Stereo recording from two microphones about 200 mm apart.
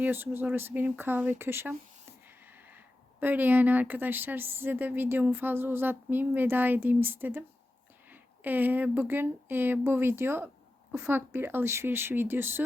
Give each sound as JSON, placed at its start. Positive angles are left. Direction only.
{"t": 0.0, "sound": "speech", "side_deg": -10}